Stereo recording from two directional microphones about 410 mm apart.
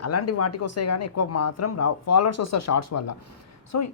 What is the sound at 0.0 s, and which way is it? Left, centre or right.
Speech, left.